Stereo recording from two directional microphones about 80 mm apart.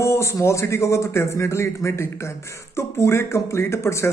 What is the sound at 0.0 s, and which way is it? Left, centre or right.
A man's voice, left.